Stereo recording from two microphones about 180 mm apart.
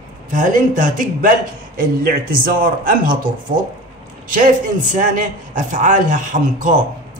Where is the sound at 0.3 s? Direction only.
45° right (ahead or behind).